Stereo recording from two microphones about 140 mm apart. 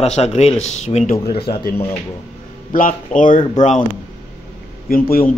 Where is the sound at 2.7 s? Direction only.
75° left (ahead or behind).